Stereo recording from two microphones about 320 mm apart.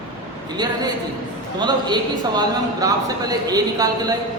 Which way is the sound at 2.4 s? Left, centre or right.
Centre.